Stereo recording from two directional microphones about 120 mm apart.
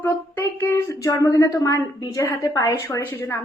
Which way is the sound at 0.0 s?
15° left (ahead or behind).